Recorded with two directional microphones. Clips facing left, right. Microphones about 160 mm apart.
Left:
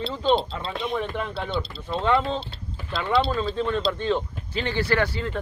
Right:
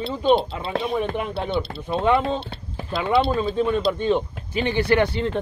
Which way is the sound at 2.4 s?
60° right (ahead or behind).